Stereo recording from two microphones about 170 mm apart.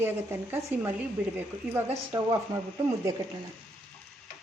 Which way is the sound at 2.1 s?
20° right (ahead or behind).